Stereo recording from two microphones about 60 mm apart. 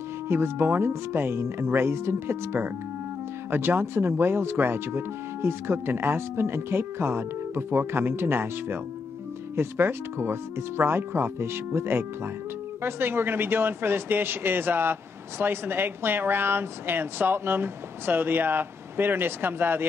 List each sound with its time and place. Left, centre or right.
0.3 s speech: right